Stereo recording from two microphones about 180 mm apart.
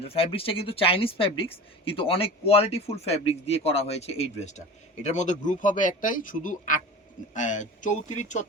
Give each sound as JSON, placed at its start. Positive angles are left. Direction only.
{"t": 0.0, "sound": "speech", "side_deg": 30}